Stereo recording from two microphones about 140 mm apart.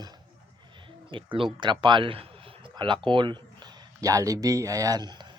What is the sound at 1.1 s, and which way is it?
A man's voice, 35° right (ahead or behind).